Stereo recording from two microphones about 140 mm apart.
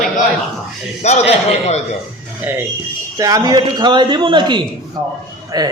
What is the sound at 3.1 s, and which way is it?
Speech, 25° right (ahead or behind).